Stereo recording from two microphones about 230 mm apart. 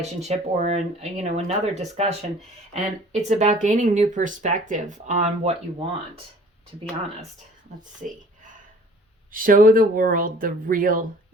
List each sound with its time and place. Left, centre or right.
0.0 s speech: right
8.0 s speech: right
9.3 s speech: right